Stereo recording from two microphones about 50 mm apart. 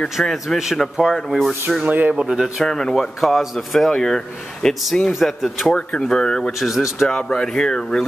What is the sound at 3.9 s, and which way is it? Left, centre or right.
Speech, centre.